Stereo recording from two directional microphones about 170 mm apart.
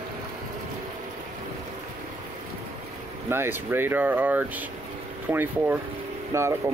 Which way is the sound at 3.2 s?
15° right (ahead or behind).